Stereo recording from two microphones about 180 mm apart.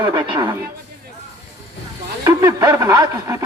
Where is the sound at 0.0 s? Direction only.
25° right (ahead or behind).